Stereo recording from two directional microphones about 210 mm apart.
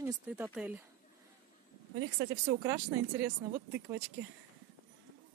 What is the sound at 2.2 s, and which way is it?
Speech, 15° right (ahead or behind).